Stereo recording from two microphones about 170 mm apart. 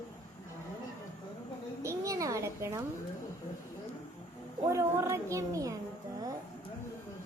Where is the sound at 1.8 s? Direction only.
20° right (ahead or behind).